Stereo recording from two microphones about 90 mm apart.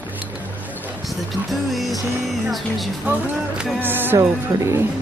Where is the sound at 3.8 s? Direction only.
25° right (ahead or behind).